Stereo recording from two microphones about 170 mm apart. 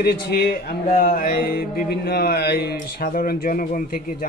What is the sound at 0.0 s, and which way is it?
Speech, 65° left (ahead or behind).